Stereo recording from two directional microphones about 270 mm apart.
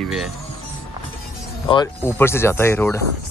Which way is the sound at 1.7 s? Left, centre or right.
Centre.